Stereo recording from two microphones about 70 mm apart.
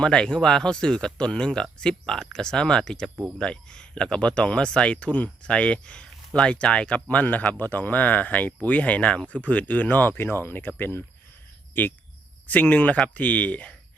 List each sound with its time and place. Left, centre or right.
0.0 s speech: centre